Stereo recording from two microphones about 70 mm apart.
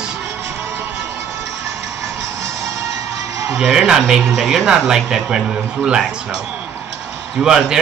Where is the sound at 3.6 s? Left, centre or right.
Centre.